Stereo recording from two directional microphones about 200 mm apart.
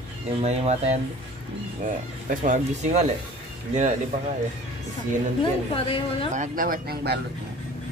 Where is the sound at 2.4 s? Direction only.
35° right (ahead or behind).